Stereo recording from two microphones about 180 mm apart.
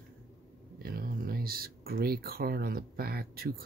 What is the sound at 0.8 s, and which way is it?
Speech, 55° right (ahead or behind).